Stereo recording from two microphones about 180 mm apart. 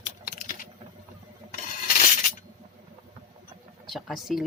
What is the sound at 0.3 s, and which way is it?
Typing, 50° left (ahead or behind).